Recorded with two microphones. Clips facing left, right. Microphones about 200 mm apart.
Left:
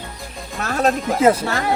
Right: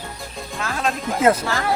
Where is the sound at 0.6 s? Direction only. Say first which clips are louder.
Left 6 dB; 40° left (ahead or behind).